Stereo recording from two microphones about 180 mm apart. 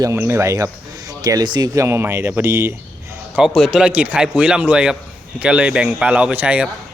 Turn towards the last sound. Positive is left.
turn(degrees=-5)  # may be behind; listen again after turning